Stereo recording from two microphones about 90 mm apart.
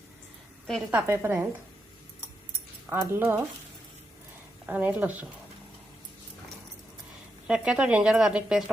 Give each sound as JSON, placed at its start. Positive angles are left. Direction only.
{"t": 0.9, "sound": "a woman's voice", "side_deg": -25}
{"t": 2.9, "sound": "a woman's voice", "side_deg": -25}
{"t": 4.7, "sound": "speech", "side_deg": -20}
{"t": 7.4, "sound": "speech", "side_deg": -10}